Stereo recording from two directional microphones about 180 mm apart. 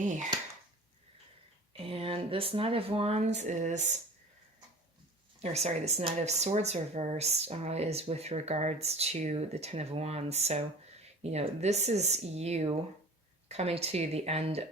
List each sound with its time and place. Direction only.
1.7 s speech: 30° right (ahead or behind)
5.4 s speech: 35° right (ahead or behind)